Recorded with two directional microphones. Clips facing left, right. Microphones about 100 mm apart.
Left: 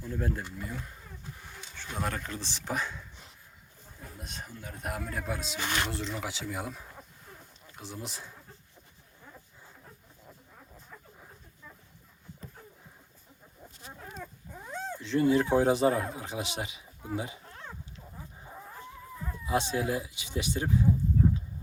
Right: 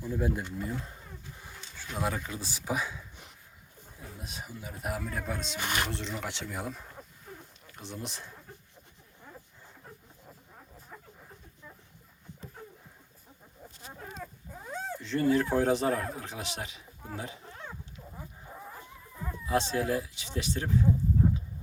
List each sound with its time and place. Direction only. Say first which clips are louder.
0.0 s speech: right 3 dB; 10° right (ahead or behind)
0.5 s speech: right 4 dB; 25° right (ahead or behind)
1.5 s a man's voice: even; 10° right (ahead or behind)
5.5 s speech: even; 15° right (ahead or behind)
5.9 s a man's voice: left 1 dB; centre (ahead or behind)
13.6 s chicken: right 1 dB; 5° left (ahead or behind)
14.7 s speech: left 2 dB; 5° right (ahead or behind)
19.5 s speech: right 1 dB; 5° left (ahead or behind)